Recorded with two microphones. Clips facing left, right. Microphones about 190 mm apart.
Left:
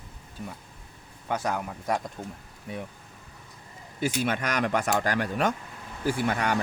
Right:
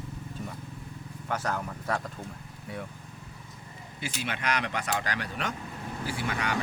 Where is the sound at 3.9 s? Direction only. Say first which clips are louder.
Left 8 dB; 45° left (ahead or behind).